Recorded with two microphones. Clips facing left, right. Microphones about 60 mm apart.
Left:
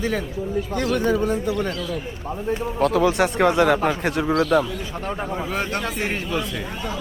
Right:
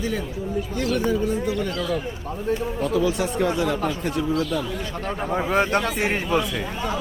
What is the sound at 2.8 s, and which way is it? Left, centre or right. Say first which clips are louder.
Speech: left 7 dB; left.